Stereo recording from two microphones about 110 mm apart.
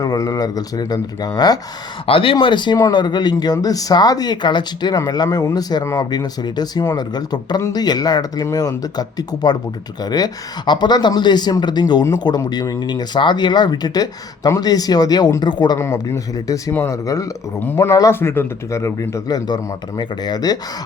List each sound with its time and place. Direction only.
0.0 s speech: 35° left (ahead or behind)
2.0 s speech: 55° left (ahead or behind); by 19.4 s 30° left (ahead or behind)
19.5 s speech: 40° left (ahead or behind)